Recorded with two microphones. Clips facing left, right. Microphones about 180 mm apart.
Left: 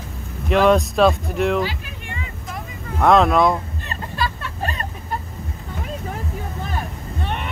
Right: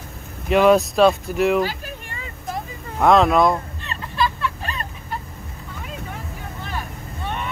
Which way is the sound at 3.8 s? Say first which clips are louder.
Right 2 dB; 45° left (ahead or behind).